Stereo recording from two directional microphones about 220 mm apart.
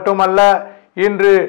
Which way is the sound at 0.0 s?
15° left (ahead or behind).